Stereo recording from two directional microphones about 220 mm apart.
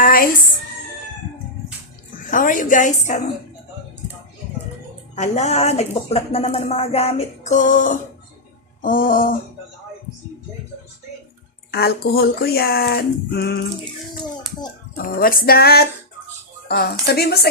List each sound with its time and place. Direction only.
0.0 s music: 40° left (ahead or behind)
2.3 s a woman's voice: 35° left (ahead or behind)
5.1 s a woman's voice: 30° left (ahead or behind)
11.7 s speech: 45° left (ahead or behind)
14.9 s speech: 40° left (ahead or behind)